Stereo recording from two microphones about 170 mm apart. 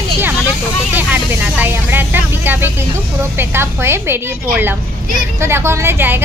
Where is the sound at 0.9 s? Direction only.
10° right (ahead or behind).